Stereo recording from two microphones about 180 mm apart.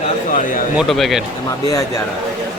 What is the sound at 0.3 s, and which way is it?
Speech, 50° left (ahead or behind).